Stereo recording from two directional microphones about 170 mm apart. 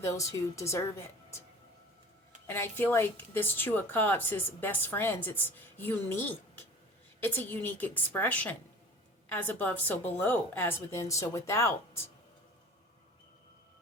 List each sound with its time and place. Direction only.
0.0 s a woman's voice: 20° left (ahead or behind)
2.5 s a woman's voice: 10° left (ahead or behind)